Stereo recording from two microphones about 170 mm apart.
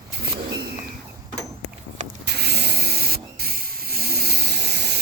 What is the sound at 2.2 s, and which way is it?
Hiss, 75° right (ahead or behind).